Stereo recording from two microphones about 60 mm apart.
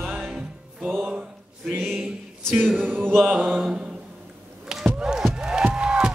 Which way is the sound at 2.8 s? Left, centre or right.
Right.